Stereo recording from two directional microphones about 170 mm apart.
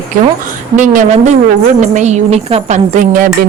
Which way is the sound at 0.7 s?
45° right (ahead or behind).